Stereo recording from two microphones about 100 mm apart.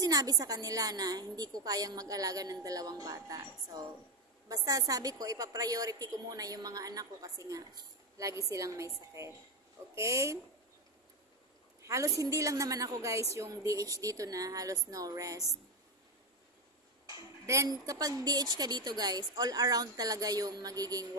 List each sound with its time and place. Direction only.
0.0 s a woman's voice: 40° right (ahead or behind)
11.8 s a woman's voice: 30° right (ahead or behind)
17.0 s a woman's voice: 35° right (ahead or behind)